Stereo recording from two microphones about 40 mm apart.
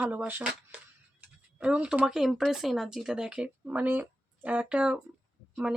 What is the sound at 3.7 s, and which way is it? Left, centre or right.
Speech, right.